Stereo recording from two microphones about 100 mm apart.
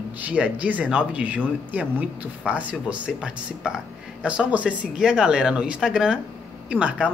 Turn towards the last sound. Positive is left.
turn(degrees=-10)  # may be behind; listen again after turning